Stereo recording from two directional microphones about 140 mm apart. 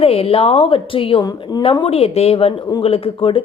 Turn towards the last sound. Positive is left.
turn(degrees=40)  # may be behind; listen again after turning